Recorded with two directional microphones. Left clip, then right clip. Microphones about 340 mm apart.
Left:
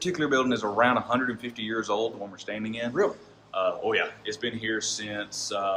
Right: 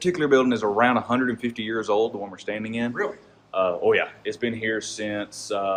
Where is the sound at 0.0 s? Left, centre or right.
Right.